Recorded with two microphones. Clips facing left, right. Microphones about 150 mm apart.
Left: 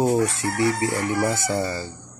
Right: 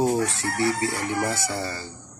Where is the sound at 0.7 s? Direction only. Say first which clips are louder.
Left 3 dB; 15° left (ahead or behind).